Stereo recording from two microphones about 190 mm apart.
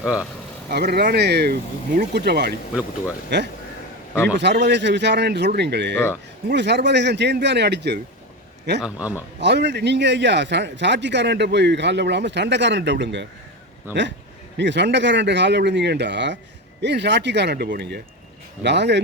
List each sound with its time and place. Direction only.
0.0 s speech: 5° right (ahead or behind)
0.7 s a man's voice: 55° right (ahead or behind)
13.9 s speech: 10° right (ahead or behind)
14.6 s a man's voice: 65° right (ahead or behind)